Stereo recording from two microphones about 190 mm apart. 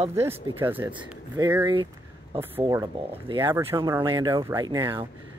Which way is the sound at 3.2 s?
25° right (ahead or behind).